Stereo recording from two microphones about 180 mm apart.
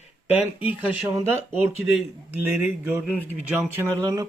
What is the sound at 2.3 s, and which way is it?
Speech, 10° right (ahead or behind).